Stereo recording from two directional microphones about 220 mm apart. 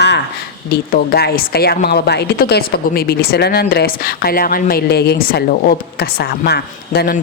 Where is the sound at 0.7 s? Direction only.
45° left (ahead or behind).